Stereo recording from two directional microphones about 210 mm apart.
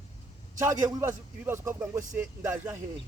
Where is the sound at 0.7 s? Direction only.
15° right (ahead or behind).